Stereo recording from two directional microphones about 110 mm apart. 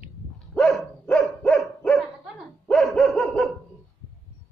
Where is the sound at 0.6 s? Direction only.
5° left (ahead or behind).